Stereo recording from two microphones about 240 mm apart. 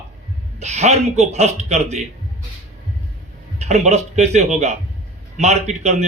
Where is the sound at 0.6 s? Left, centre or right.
Right.